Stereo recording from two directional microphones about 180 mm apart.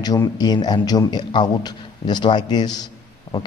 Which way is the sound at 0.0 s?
20° left (ahead or behind).